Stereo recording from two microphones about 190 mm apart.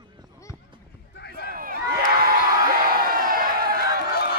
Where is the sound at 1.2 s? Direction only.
55° left (ahead or behind).